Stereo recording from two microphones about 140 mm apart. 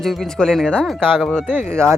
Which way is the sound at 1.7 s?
20° right (ahead or behind).